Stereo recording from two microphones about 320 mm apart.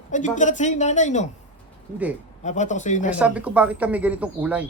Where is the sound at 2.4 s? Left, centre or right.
Left.